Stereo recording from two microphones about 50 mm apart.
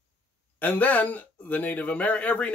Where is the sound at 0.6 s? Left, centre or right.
Left.